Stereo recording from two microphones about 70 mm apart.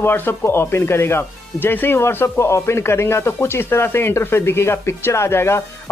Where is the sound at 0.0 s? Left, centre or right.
Left.